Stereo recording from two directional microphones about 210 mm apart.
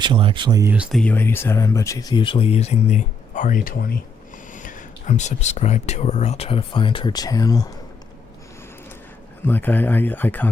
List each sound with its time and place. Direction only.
0.0 s speech: 25° right (ahead or behind)
0.7 s speech: 5° right (ahead or behind); by 7.7 s 15° left (ahead or behind)
9.5 s speech: 10° left (ahead or behind)